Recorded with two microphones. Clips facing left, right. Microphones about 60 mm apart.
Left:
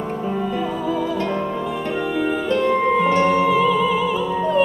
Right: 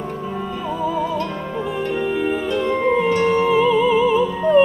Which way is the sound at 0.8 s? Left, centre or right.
Centre.